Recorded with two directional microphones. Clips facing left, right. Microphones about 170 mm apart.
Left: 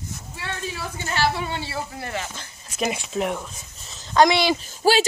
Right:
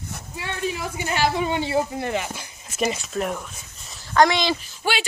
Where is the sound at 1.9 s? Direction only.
20° right (ahead or behind).